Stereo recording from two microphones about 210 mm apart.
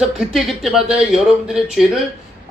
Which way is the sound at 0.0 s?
Centre (ahead or behind).